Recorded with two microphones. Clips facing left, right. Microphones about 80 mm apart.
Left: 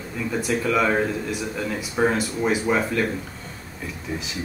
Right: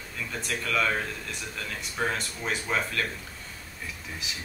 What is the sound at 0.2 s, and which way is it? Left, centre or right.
Speech, centre.